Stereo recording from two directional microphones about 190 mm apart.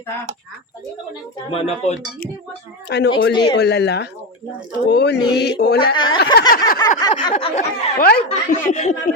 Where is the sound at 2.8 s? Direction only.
65° left (ahead or behind).